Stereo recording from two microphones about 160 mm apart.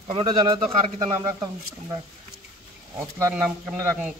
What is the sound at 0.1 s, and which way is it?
Speech, 30° right (ahead or behind).